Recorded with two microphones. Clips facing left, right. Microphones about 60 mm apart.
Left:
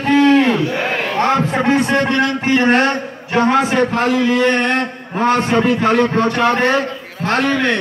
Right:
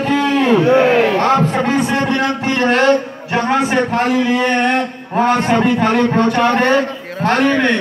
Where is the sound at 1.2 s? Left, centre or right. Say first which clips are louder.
Right 1 dB; centre.